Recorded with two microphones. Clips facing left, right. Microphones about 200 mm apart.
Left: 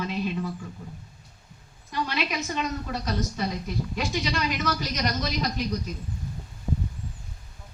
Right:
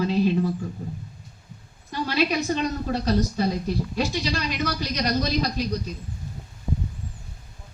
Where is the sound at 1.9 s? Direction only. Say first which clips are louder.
Right 5 dB; 35° right (ahead or behind).